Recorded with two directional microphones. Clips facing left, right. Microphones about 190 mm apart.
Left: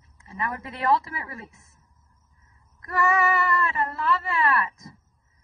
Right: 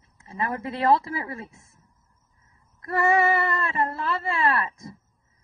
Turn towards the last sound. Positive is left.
turn(degrees=-30)  # may be behind; listen again after turning